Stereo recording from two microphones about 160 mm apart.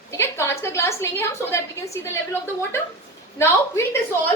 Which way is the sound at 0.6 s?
15° left (ahead or behind).